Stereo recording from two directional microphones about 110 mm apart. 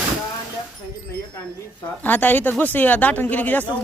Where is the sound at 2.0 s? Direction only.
15° left (ahead or behind).